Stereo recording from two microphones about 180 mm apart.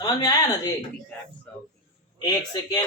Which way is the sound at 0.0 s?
20° left (ahead or behind).